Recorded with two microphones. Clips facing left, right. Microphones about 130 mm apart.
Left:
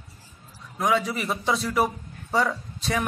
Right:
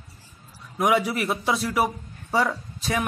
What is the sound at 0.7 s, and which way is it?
Speech, 15° right (ahead or behind).